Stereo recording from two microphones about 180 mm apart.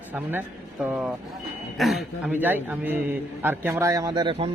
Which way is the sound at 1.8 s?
Centre (ahead or behind).